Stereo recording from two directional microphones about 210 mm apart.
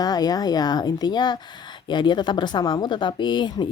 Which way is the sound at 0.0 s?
20° left (ahead or behind).